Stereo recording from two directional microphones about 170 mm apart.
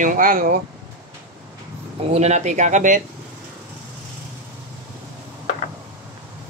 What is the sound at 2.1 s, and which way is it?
Speech, 40° right (ahead or behind).